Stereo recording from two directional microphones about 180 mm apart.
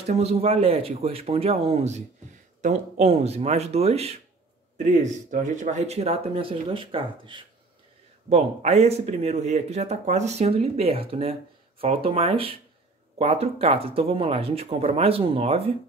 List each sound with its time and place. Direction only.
0.0 s speech: 35° right (ahead or behind)